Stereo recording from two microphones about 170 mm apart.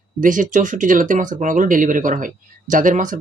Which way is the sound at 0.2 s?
50° right (ahead or behind).